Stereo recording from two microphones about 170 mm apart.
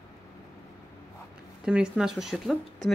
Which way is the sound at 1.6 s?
5° right (ahead or behind).